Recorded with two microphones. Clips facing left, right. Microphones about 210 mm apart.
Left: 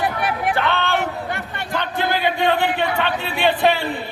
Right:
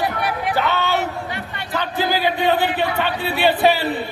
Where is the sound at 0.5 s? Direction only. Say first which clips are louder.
Right 1 dB; 5° right (ahead or behind).